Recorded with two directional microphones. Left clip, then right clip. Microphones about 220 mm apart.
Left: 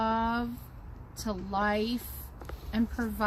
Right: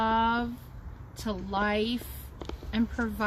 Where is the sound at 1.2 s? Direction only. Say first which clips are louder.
Right 1 dB; centre (ahead or behind).